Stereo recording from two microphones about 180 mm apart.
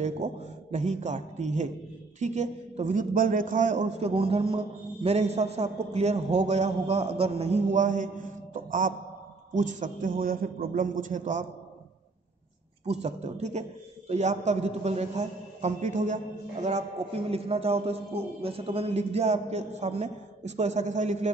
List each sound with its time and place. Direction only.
0.0 s a man's voice: 40° right (ahead or behind)
12.8 s a man's voice: 35° right (ahead or behind)